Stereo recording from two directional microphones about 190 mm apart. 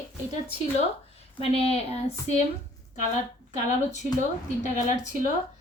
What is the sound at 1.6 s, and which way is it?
Speech, 30° left (ahead or behind).